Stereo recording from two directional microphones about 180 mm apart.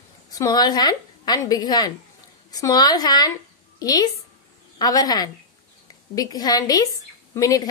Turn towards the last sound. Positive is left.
turn(degrees=20)  # may be behind; listen again after turning